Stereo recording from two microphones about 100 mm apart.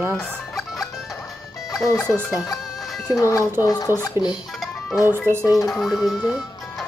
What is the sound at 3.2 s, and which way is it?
Speech, 35° left (ahead or behind).